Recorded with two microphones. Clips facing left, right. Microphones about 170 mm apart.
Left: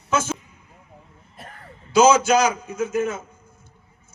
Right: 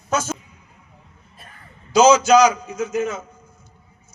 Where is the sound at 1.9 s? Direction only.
55° left (ahead or behind).